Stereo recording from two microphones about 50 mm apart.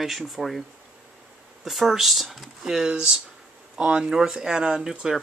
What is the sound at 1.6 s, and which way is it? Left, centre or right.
Speech, centre.